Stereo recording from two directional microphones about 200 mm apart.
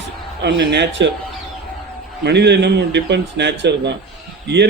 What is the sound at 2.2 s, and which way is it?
A man's voice, 60° right (ahead or behind).